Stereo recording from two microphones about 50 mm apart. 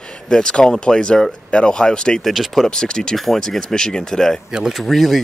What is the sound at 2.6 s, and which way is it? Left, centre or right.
Speech, centre.